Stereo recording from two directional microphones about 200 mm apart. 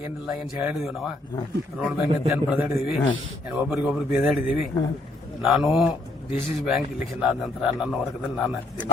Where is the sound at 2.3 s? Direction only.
5° right (ahead or behind).